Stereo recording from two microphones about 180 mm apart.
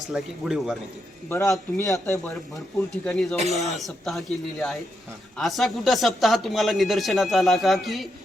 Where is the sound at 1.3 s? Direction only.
15° left (ahead or behind).